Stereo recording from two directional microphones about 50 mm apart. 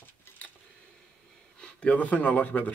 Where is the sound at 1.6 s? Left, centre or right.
Left.